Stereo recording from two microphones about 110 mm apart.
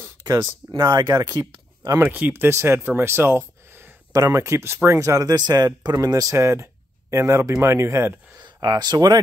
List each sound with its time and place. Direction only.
0.2 s speech: 40° right (ahead or behind)
2.0 s speech: 15° right (ahead or behind)
8.4 s speech: 40° right (ahead or behind)